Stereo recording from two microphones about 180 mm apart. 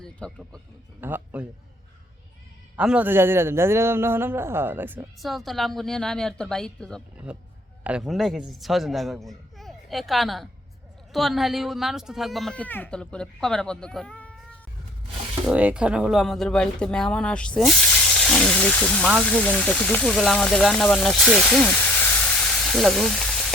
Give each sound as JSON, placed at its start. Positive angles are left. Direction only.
{"t": 0.0, "sound": "speech", "side_deg": 5}
{"t": 1.0, "sound": "a man's voice", "side_deg": -10}
{"t": 2.7, "sound": "a man's voice", "side_deg": -5}
{"t": 5.2, "sound": "speech", "side_deg": 0}
{"t": 7.3, "sound": "speech", "side_deg": -5}
{"t": 15.4, "sound": "speech", "side_deg": -5}